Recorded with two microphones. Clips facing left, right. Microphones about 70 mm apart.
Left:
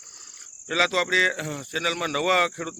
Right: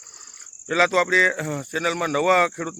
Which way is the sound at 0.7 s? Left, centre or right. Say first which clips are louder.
Right 4 dB; right.